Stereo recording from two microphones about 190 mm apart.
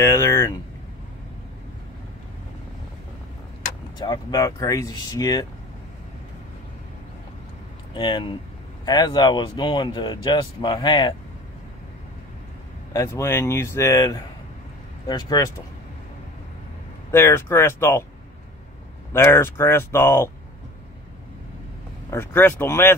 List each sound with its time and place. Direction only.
0.0 s speech: 15° left (ahead or behind)
4.0 s speech: 20° left (ahead or behind)
7.9 s speech: 25° left (ahead or behind)
12.9 s speech: 15° left (ahead or behind)
17.1 s speech: 10° left (ahead or behind)
19.1 s speech: 15° left (ahead or behind)
22.1 s speech: 10° left (ahead or behind)